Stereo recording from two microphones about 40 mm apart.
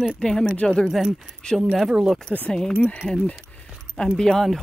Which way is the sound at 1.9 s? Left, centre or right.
Centre.